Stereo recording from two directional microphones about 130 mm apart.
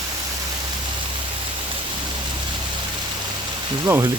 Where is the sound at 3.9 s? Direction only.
15° right (ahead or behind).